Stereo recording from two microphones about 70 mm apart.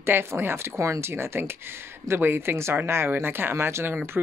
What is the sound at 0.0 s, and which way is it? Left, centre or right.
Speech, right.